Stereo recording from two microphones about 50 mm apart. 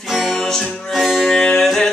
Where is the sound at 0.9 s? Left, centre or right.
Centre.